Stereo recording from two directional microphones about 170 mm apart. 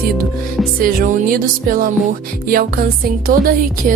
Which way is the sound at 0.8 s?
55° right (ahead or behind).